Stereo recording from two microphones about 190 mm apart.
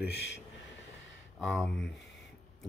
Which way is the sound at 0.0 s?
60° left (ahead or behind).